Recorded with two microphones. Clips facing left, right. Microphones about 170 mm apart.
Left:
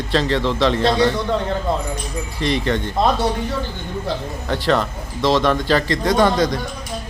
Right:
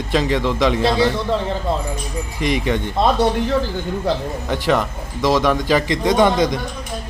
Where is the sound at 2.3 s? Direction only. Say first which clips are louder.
Even; 15° right (ahead or behind).